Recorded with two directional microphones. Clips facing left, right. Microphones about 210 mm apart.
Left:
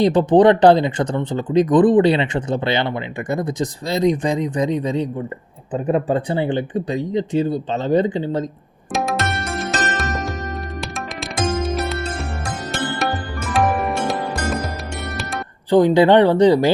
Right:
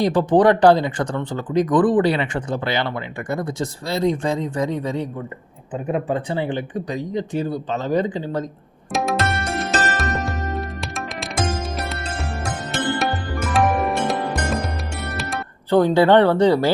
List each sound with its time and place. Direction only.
0.0 s speech: 20° left (ahead or behind)
5.7 s speech: 35° left (ahead or behind)
8.9 s music: centre (ahead or behind)
15.7 s speech: 15° left (ahead or behind)